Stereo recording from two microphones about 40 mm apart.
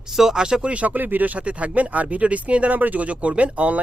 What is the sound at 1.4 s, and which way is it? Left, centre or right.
Speech, right.